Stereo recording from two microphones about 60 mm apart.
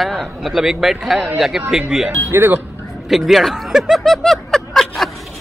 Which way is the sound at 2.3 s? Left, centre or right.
Right.